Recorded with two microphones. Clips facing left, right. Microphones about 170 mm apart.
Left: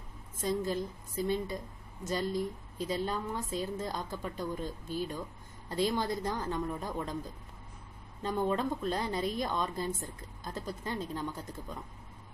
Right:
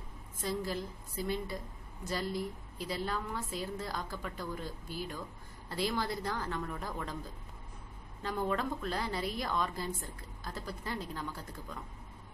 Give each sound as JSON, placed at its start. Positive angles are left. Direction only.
{"t": 0.4, "sound": "a woman's voice", "side_deg": 20}
{"t": 8.2, "sound": "a woman's voice", "side_deg": 20}